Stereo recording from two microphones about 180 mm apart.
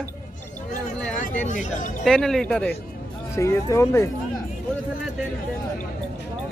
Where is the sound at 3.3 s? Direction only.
15° left (ahead or behind).